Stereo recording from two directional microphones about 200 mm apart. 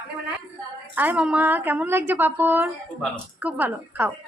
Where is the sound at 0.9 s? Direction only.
10° right (ahead or behind).